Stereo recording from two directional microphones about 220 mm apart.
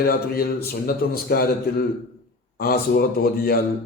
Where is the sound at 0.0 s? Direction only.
45° left (ahead or behind).